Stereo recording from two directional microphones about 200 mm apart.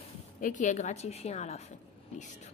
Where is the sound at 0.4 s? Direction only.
40° left (ahead or behind).